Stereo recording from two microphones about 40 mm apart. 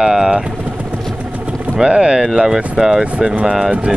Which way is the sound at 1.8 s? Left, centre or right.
Right.